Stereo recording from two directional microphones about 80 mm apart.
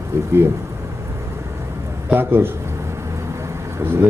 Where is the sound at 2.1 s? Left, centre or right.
Right.